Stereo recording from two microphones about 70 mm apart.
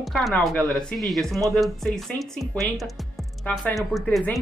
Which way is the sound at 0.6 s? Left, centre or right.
Centre.